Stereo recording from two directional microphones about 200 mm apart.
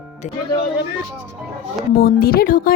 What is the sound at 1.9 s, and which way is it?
Speech, 50° left (ahead or behind).